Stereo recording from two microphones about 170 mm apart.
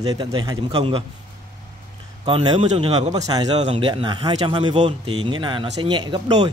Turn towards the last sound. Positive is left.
turn(degrees=-25)  # may be behind; listen again after turning